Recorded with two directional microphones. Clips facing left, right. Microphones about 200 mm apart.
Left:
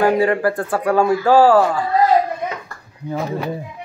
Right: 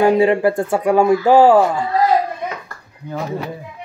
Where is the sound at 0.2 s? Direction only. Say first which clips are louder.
Right 3 dB; 20° right (ahead or behind).